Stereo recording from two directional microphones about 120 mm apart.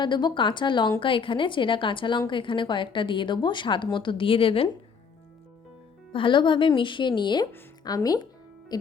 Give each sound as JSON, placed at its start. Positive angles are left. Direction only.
{"t": 0.0, "sound": "a woman's voice", "side_deg": 40}
{"t": 6.1, "sound": "speech", "side_deg": 45}